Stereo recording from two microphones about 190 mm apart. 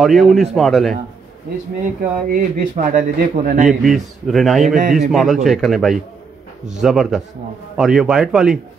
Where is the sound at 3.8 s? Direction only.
Centre (ahead or behind).